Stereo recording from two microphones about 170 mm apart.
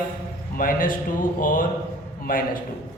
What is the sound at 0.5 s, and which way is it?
Speech, 55° left (ahead or behind).